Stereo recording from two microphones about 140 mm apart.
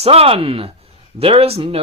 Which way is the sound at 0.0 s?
45° right (ahead or behind).